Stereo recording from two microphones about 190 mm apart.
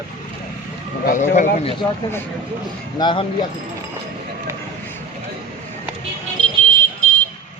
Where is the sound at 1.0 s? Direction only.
40° left (ahead or behind).